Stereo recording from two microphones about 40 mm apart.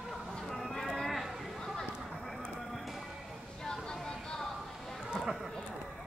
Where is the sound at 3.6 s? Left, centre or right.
Centre.